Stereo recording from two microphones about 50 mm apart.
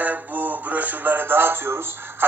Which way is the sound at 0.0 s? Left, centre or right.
Right.